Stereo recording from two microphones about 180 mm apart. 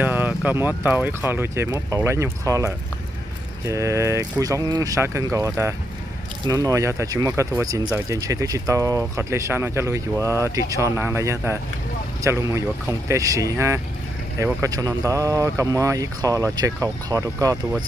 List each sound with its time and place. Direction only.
0.0 s speech: 10° right (ahead or behind)